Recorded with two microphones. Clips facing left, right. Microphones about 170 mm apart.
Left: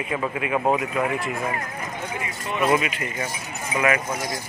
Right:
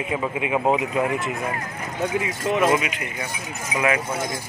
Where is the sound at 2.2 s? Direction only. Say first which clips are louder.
Right 2 dB; 90° right.